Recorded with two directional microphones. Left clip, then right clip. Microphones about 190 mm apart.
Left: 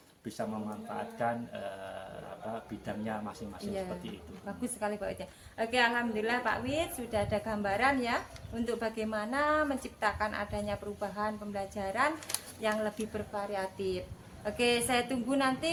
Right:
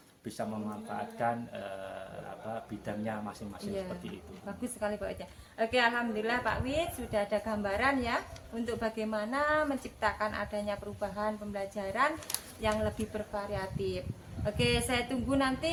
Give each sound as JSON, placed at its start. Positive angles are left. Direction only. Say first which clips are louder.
{"t": 1.2, "sound": "speech", "louder": "right 1 dB", "side_deg": -20}
{"t": 2.8, "sound": "speech", "louder": "even", "side_deg": -20}
{"t": 4.8, "sound": "a woman's voice", "louder": "even", "side_deg": 25}